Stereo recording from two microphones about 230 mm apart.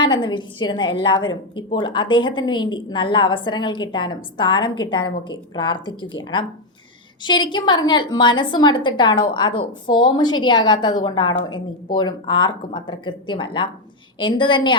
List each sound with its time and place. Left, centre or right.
0.0 s a woman's voice: centre
7.2 s a woman's voice: centre